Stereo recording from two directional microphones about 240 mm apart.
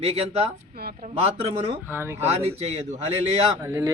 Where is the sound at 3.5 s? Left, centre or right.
Centre.